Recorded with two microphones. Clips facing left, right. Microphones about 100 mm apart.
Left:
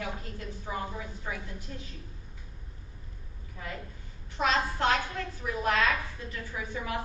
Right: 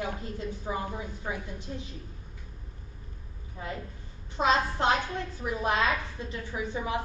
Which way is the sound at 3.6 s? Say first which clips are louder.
Right 4 dB; 30° right (ahead or behind).